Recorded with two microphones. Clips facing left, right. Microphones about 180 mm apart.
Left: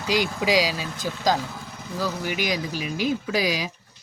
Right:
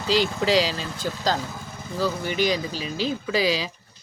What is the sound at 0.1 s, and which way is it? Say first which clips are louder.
Speech: right 1 dB; 15° left (ahead or behind).